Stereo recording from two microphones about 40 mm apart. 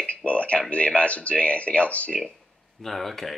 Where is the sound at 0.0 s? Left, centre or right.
Left.